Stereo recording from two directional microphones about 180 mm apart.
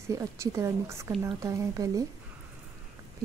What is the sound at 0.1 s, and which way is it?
A woman's voice, 15° right (ahead or behind).